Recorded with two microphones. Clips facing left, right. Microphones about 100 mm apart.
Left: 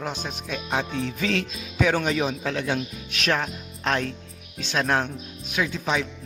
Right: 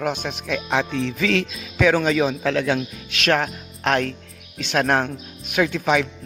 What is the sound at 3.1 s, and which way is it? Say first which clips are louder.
Speech: right 5 dB; 70° right (ahead or behind).